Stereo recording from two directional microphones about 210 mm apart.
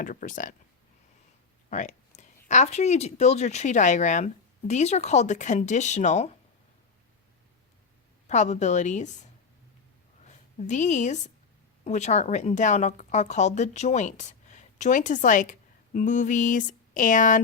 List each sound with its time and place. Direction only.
0.0 s speech: 40° left (ahead or behind)
1.7 s speech: 35° left (ahead or behind)
8.3 s speech: 35° left (ahead or behind)
10.2 s a woman's voice: 35° left (ahead or behind)